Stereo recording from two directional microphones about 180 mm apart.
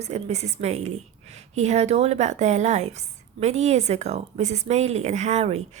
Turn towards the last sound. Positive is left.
turn(degrees=-35)  # may be behind; listen again after turning